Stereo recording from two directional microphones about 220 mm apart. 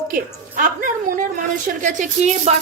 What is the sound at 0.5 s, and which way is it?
Speech, 40° right (ahead or behind).